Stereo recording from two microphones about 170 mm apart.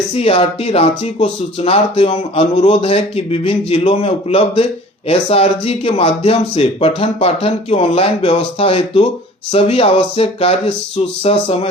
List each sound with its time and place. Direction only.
0.1 s speech: 35° left (ahead or behind)